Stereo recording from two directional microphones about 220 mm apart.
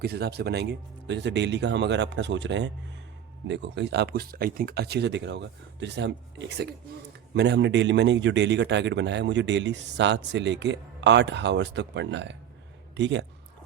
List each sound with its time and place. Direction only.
0.0 s a man's voice: 45° right (ahead or behind)